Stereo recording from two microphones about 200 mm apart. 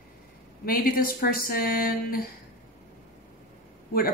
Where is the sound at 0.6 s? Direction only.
45° left (ahead or behind).